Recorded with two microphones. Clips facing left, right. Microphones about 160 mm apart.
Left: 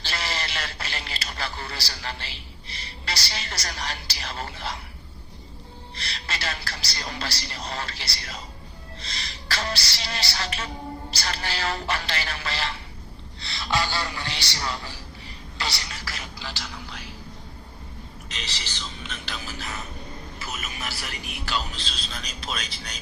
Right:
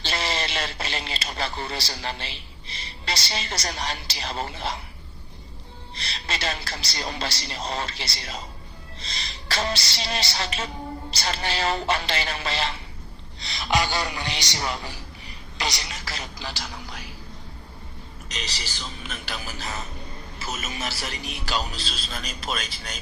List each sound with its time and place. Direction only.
0.0 s a man's voice: 25° right (ahead or behind)
5.9 s a woman's voice: 20° right (ahead or behind)
15.5 s a sound: 15° right (ahead or behind)
18.3 s speech: 40° right (ahead or behind)
19.5 s a woman's voice: 30° right (ahead or behind)
21.4 s speech: 40° right (ahead or behind)
21.7 s a man's voice: 10° right (ahead or behind)